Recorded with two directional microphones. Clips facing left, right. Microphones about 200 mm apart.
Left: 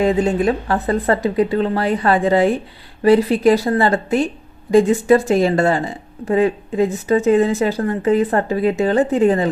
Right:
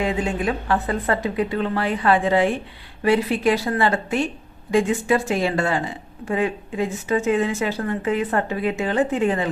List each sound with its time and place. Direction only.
0.0 s speech: 40° left (ahead or behind)